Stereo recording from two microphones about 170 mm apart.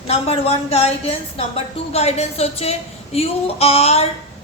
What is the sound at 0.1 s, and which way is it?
A woman's voice, 35° left (ahead or behind).